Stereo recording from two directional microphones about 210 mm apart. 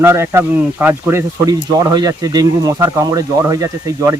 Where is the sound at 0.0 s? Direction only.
10° right (ahead or behind).